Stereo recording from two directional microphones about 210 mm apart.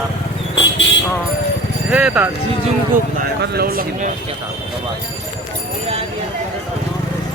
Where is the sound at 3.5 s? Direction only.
45° right (ahead or behind).